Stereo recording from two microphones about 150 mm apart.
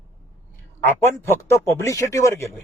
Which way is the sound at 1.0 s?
15° left (ahead or behind).